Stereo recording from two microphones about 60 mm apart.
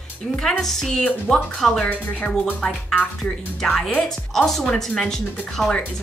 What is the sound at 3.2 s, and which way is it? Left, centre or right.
Speech, centre.